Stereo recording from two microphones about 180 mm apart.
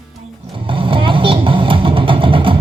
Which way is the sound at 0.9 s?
30° right (ahead or behind).